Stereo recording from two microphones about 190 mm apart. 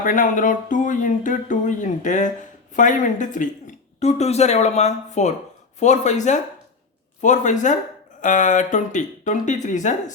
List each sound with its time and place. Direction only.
0.0 s speech: 45° left (ahead or behind)